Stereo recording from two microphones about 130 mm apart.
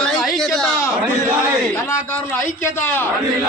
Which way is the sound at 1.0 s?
15° right (ahead or behind).